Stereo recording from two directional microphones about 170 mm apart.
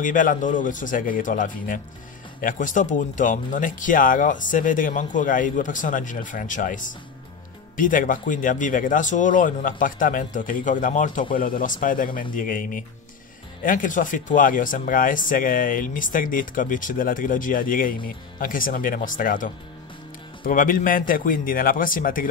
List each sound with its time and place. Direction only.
0.0 s a man's voice: 50° left (ahead or behind)